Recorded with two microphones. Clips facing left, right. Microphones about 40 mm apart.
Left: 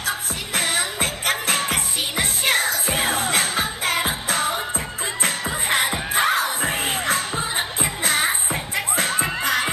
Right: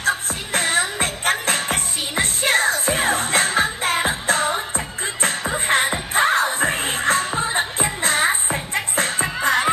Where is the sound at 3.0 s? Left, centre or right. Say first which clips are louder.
Right 2 dB; right.